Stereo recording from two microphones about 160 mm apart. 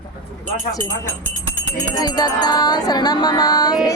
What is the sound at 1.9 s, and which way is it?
Music, 25° left (ahead or behind).